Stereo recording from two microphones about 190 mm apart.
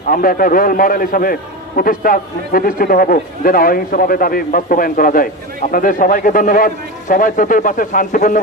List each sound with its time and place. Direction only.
0.1 s a man's voice: 50° left (ahead or behind)